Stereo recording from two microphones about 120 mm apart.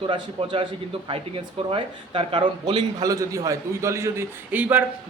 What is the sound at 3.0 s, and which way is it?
A man's voice, 30° right (ahead or behind).